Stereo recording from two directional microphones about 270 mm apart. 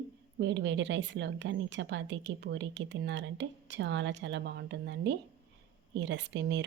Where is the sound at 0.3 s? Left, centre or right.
Right.